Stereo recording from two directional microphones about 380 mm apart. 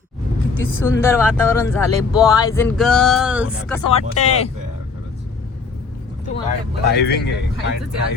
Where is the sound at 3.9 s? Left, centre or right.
Centre.